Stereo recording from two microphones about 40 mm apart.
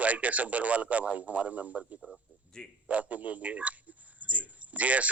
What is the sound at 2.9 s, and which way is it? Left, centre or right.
Speech, right.